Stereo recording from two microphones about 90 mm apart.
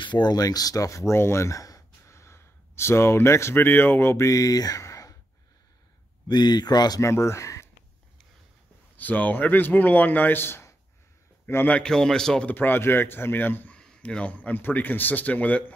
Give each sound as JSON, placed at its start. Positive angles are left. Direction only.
{"t": 0.0, "sound": "speech", "side_deg": 55}
{"t": 6.2, "sound": "speech", "side_deg": 50}
{"t": 7.0, "sound": "speech", "side_deg": 30}
{"t": 8.9, "sound": "a man's voice", "side_deg": 20}
{"t": 11.8, "sound": "speech", "side_deg": 5}
{"t": 12.4, "sound": "a man's voice", "side_deg": 20}
{"t": 13.7, "sound": "speech", "side_deg": 10}